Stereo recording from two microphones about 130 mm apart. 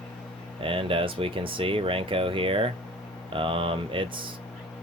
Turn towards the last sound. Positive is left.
turn(degrees=-40)  # may be behind; listen again after turning